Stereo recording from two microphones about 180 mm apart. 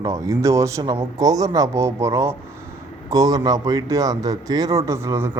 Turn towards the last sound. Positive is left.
turn(degrees=-15)  # may be behind; listen again after turning